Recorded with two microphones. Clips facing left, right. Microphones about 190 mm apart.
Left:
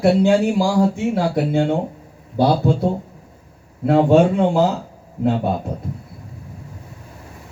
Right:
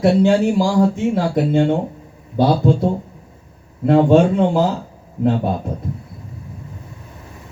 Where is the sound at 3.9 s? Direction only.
5° left (ahead or behind).